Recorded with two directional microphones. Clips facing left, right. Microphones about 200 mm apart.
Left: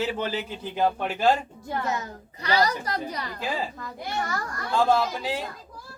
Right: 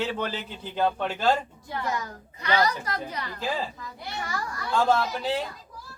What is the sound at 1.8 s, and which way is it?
Speech, 25° left (ahead or behind).